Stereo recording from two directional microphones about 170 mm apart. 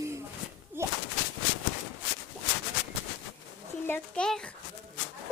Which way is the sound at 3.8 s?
10° left (ahead or behind).